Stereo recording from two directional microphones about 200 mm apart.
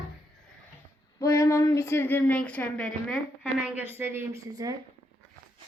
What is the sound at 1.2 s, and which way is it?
Speech, 15° left (ahead or behind).